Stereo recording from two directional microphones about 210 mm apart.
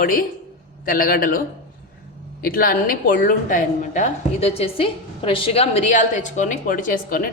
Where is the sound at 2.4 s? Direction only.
45° left (ahead or behind).